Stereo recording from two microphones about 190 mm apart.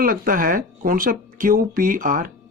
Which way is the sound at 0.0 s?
50° right (ahead or behind).